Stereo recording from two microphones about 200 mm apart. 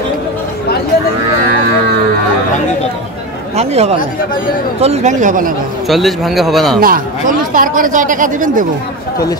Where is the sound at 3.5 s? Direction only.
30° right (ahead or behind).